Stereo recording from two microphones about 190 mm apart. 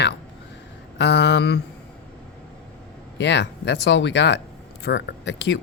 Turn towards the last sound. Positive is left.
turn(degrees=65)  # may be behind; listen again after turning